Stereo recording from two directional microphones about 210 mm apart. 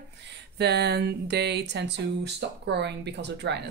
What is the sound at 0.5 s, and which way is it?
Speech, 50° right (ahead or behind).